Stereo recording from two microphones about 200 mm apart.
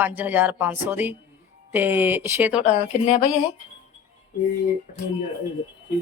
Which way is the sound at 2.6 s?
35° left (ahead or behind).